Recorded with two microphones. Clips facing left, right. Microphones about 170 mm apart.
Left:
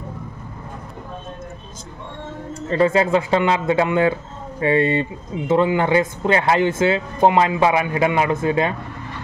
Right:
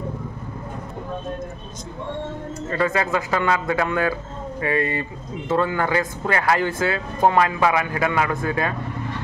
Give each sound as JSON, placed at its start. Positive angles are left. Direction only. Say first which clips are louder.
{"t": 2.7, "sound": "speech", "louder": "left 6 dB", "side_deg": 25}